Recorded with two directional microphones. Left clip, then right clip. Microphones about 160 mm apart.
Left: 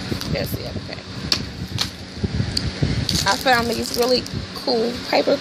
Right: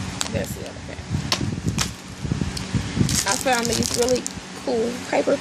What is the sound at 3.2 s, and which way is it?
Speech, 5° left (ahead or behind).